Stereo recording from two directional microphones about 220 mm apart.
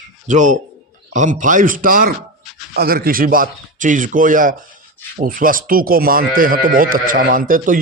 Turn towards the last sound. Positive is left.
turn(degrees=-40)  # may be behind; listen again after turning